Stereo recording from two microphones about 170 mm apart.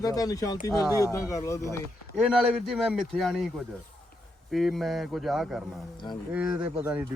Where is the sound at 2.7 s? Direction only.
Centre (ahead or behind).